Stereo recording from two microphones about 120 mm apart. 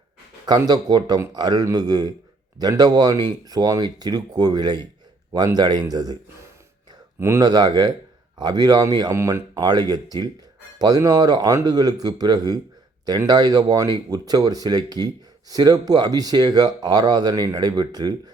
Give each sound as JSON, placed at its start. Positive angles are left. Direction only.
{"t": 0.4, "sound": "speech", "side_deg": -35}
{"t": 7.2, "sound": "speech", "side_deg": -25}